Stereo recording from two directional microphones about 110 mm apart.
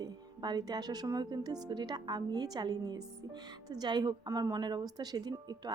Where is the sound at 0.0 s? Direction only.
40° right (ahead or behind).